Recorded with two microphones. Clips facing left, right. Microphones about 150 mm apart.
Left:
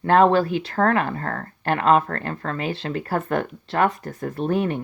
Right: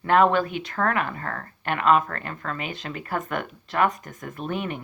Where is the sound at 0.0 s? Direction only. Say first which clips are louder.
Left 3 dB; 35° left (ahead or behind).